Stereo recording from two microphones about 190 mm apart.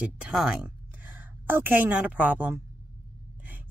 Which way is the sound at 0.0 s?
5° right (ahead or behind).